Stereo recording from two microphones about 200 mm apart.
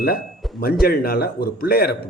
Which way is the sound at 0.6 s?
50° left (ahead or behind).